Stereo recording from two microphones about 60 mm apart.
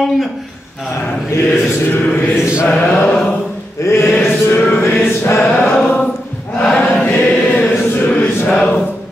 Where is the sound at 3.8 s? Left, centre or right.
Left.